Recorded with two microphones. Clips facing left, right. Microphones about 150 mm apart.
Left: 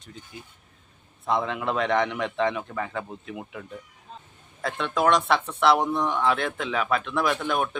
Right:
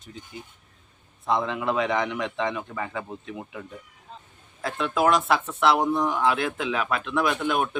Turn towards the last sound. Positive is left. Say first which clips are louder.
# right 1 dB
turn(degrees=-5)  # may be behind; listen again after turning